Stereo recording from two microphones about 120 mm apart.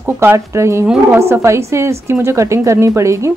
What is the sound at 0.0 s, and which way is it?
Speech, 20° right (ahead or behind).